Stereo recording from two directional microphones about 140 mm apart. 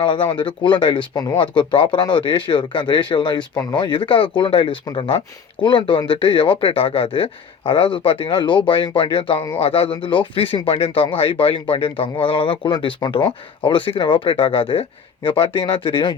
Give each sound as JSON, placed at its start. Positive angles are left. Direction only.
{"t": 0.0, "sound": "speech", "side_deg": 40}